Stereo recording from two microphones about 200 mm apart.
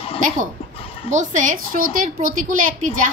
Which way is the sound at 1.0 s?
40° right (ahead or behind).